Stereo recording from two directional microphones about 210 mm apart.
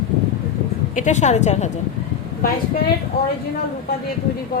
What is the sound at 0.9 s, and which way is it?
Speech, 35° left (ahead or behind).